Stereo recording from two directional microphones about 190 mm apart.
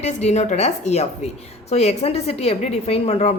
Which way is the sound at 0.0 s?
35° left (ahead or behind).